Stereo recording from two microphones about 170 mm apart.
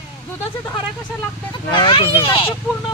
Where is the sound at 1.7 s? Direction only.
30° left (ahead or behind).